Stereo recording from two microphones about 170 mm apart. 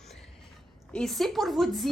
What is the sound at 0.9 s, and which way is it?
Speech, centre (ahead or behind).